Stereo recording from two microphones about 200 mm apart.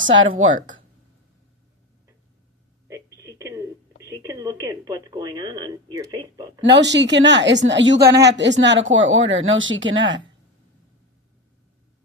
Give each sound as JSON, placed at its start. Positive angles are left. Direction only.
{"t": 0.0, "sound": "speech", "side_deg": -70}
{"t": 2.8, "sound": "telephone", "side_deg": -15}
{"t": 4.2, "sound": "speech", "side_deg": -15}
{"t": 6.6, "sound": "a woman's voice", "side_deg": -60}